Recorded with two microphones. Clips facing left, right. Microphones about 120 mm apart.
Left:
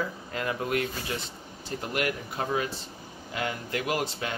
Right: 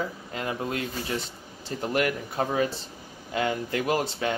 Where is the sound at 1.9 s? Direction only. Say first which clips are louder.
Right 4 dB; 40° right (ahead or behind).